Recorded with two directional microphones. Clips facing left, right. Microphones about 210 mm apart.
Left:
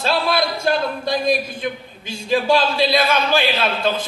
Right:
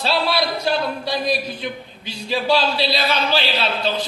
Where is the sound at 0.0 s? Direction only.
50° left (ahead or behind).